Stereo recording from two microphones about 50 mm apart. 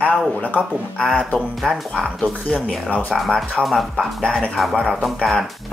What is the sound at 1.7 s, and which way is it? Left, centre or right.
Speech, centre.